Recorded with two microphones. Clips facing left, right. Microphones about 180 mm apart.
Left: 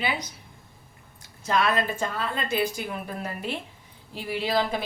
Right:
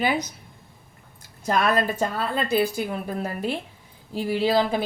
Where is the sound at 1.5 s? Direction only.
45° right (ahead or behind).